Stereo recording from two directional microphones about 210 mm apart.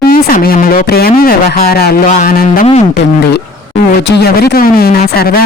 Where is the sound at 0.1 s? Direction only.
45° left (ahead or behind).